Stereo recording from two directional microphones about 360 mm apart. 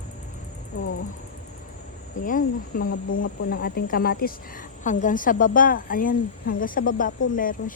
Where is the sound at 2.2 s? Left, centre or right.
Left.